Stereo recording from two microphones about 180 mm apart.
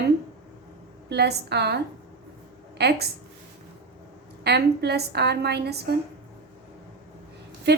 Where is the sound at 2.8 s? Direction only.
65° right (ahead or behind).